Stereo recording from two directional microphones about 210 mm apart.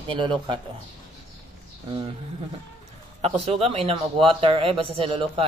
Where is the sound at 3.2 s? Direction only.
30° right (ahead or behind).